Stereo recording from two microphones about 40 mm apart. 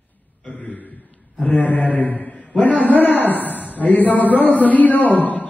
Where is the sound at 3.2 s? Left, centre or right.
Left.